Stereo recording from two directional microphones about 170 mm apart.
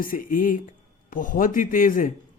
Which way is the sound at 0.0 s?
55° left (ahead or behind).